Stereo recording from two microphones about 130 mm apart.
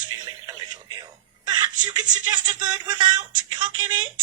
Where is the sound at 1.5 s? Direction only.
35° right (ahead or behind).